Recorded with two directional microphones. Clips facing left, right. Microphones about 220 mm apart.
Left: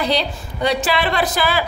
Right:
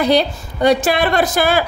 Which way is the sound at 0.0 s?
50° right (ahead or behind).